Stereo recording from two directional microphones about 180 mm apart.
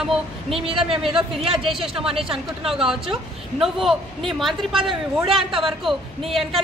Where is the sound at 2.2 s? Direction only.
5° right (ahead or behind).